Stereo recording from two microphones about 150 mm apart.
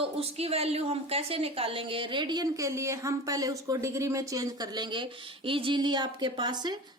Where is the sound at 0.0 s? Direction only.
40° right (ahead or behind).